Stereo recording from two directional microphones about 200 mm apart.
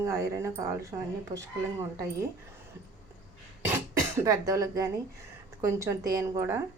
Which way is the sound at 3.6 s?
15° right (ahead or behind).